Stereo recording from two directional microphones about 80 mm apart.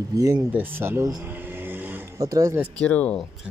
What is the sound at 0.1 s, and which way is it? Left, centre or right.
Speech, right.